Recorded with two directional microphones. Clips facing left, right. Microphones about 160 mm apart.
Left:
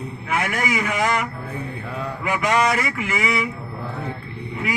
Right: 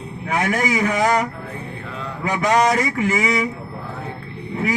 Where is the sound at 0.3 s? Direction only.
40° right (ahead or behind).